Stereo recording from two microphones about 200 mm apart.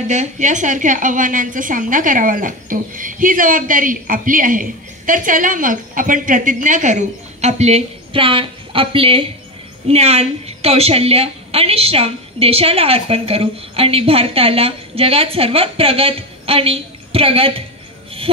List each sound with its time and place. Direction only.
0.1 s a woman's voice: 35° right (ahead or behind)